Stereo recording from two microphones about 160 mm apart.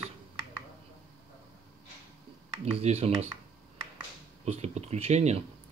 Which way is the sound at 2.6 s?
40° right (ahead or behind).